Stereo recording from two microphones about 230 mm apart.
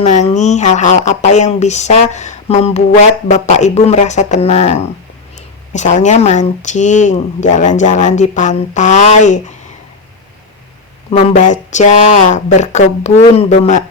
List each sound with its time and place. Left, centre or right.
0.0 s speech: left
11.1 s speech: left